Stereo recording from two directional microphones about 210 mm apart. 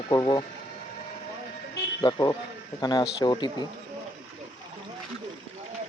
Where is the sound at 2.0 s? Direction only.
20° left (ahead or behind).